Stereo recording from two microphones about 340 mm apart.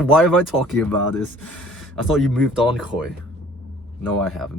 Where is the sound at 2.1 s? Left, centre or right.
Centre.